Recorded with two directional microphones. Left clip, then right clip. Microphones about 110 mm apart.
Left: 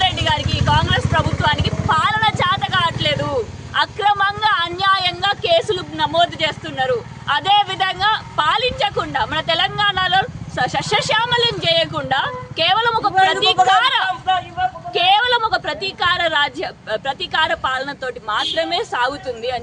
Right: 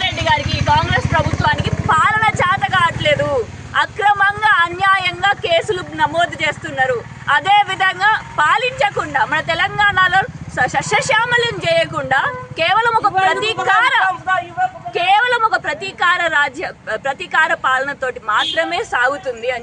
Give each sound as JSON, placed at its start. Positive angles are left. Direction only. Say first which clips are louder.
{"t": 0.0, "sound": "vehicle", "louder": "right 1 dB", "side_deg": 40}
{"t": 1.4, "sound": "vehicle", "louder": "right 1 dB", "side_deg": 5}
{"t": 5.5, "sound": "speech", "louder": "even", "side_deg": 0}
{"t": 9.3, "sound": "speech", "louder": "right 1 dB", "side_deg": 15}
{"t": 11.9, "sound": "speech", "louder": "right 3 dB", "side_deg": 15}
{"t": 15.2, "sound": "a sound", "louder": "right 2 dB", "side_deg": 5}
{"t": 16.0, "sound": "speech", "louder": "right 3 dB", "side_deg": 10}
{"t": 18.3, "sound": "speech", "louder": "right 2 dB", "side_deg": 20}